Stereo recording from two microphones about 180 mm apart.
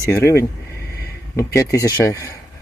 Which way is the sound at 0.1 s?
15° left (ahead or behind).